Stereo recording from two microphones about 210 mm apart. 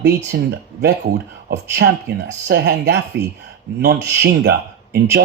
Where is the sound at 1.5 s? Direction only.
55° right (ahead or behind).